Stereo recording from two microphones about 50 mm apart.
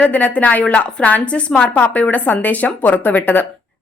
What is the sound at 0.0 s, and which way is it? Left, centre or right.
Speech, left.